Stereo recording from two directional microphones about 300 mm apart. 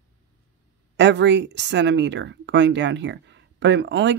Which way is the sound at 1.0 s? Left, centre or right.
Right.